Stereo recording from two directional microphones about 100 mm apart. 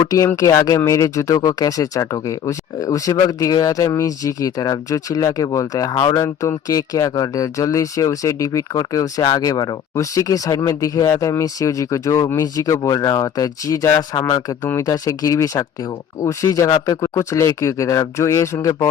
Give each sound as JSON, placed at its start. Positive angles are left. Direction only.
{"t": 0.0, "sound": "speech", "side_deg": 35}
{"t": 6.2, "sound": "speech", "side_deg": 30}